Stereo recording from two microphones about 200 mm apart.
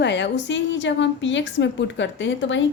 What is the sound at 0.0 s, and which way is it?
A woman's voice, 60° left (ahead or behind).